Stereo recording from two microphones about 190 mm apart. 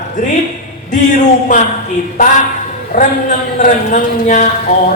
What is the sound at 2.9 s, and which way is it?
Speech, 45° left (ahead or behind).